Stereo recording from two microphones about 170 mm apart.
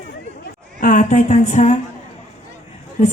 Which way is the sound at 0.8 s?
45° left (ahead or behind).